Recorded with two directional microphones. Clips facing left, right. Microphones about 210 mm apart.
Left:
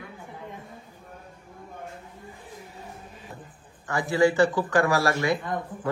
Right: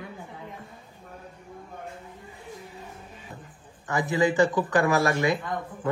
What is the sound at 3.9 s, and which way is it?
Speech, 20° right (ahead or behind).